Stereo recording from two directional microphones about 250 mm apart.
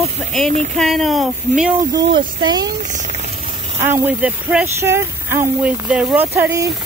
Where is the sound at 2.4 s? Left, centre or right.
Centre.